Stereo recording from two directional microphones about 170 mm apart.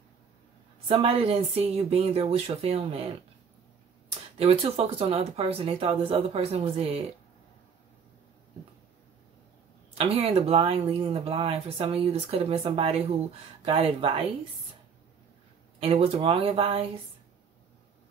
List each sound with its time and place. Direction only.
0.8 s speech: 35° right (ahead or behind)
4.4 s speech: 35° right (ahead or behind)
9.9 s speech: 35° right (ahead or behind)
15.8 s speech: 35° right (ahead or behind)